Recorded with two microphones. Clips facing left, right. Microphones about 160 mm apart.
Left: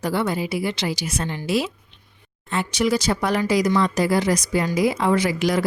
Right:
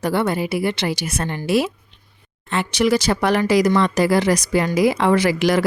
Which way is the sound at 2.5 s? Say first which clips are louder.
Right 3 dB; 75° right (ahead or behind).